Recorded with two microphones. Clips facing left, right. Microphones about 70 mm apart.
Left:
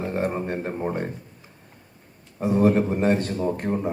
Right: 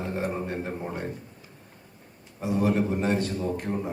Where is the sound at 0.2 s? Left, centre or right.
Left.